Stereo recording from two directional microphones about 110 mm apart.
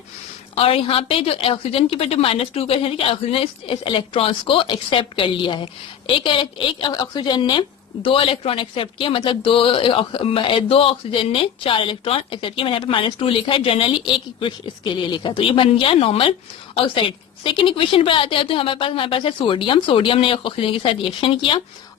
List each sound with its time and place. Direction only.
0.5 s a woman's voice: 60° left (ahead or behind); by 7.6 s 40° left (ahead or behind)
8.0 s a woman's voice: 55° left (ahead or behind)